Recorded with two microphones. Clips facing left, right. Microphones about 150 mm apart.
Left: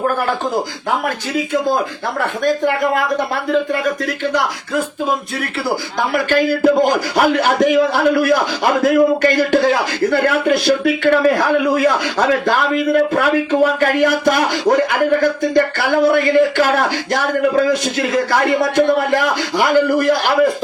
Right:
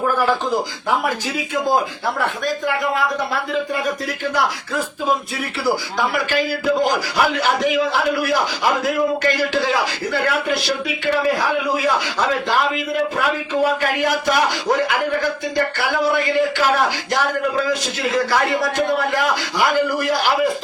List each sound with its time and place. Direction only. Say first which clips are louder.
6.1 s a man's voice: left 5 dB; 50° left (ahead or behind)